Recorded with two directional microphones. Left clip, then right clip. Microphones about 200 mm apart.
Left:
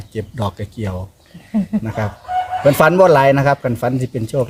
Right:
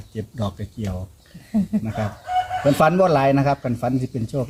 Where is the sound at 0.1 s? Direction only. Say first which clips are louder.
Left 6 dB; 60° left (ahead or behind).